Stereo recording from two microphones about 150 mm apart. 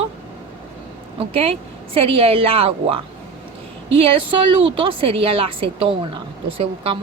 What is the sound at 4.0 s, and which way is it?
Speech, 40° right (ahead or behind).